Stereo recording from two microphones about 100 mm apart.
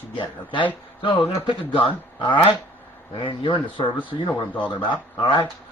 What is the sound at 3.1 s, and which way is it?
Speech, 55° left (ahead or behind).